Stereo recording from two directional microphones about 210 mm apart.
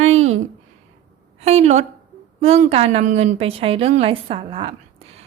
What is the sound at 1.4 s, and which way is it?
A woman's voice, 30° right (ahead or behind).